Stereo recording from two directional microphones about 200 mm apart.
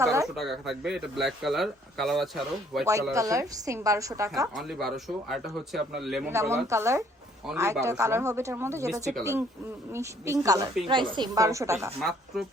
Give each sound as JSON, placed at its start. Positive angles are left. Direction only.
{"t": 0.0, "sound": "speech", "side_deg": -15}
{"t": 0.3, "sound": "speech", "side_deg": 0}
{"t": 2.8, "sound": "a woman's voice", "side_deg": -15}
{"t": 4.5, "sound": "speech", "side_deg": 0}
{"t": 6.3, "sound": "a woman's voice", "side_deg": -15}
{"t": 11.9, "sound": "speech", "side_deg": 0}